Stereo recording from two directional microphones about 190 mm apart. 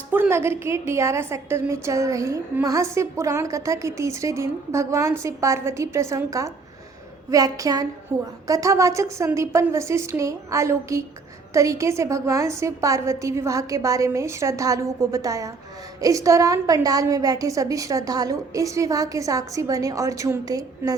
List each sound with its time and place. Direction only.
0.1 s a woman's voice: 10° right (ahead or behind)